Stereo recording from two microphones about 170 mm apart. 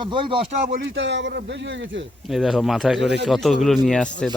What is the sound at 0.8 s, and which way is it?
A man's voice, 90° right.